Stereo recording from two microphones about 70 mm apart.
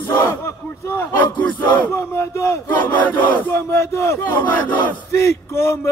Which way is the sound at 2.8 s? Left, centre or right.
Left.